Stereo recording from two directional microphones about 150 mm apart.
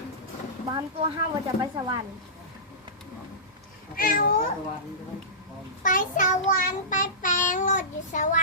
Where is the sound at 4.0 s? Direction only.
70° left (ahead or behind).